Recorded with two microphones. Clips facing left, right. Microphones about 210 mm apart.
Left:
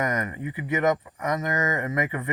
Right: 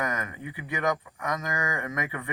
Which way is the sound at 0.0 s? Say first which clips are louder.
Left 5 dB; 20° left (ahead or behind).